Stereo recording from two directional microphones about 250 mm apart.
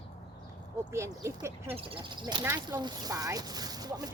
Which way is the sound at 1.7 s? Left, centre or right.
Right.